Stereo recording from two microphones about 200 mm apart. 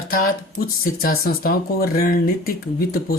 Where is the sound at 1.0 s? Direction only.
50° left (ahead or behind).